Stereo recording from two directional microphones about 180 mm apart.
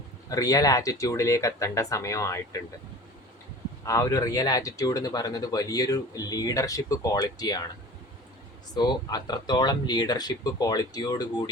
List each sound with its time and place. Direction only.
0.3 s speech: 20° left (ahead or behind)
3.8 s speech: 20° left (ahead or behind)
8.7 s speech: 20° left (ahead or behind)